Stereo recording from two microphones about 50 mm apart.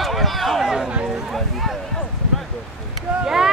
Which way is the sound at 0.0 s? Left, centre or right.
Centre.